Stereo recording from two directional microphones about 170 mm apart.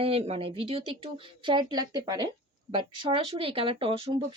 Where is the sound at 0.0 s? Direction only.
35° right (ahead or behind).